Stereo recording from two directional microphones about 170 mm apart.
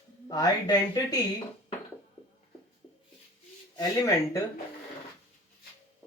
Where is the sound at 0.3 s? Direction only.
25° left (ahead or behind).